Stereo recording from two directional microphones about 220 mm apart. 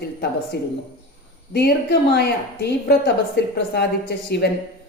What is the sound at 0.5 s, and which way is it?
A woman's voice, 45° left (ahead or behind).